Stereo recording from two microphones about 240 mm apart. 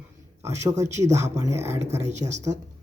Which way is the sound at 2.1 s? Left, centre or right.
Right.